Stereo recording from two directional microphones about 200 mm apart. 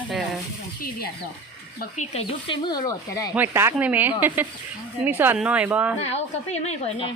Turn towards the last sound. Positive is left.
turn(degrees=35)  # may be behind; listen again after turning